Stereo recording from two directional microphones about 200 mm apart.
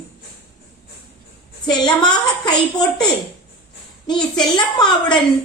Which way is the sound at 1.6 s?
20° left (ahead or behind).